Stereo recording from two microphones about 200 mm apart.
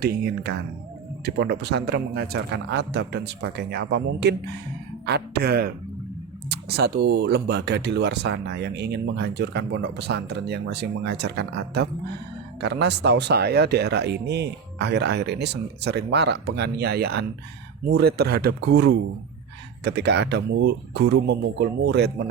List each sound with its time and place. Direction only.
0.0 s speech: 55° right (ahead or behind)